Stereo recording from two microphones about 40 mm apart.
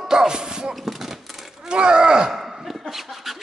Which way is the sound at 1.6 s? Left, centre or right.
Right.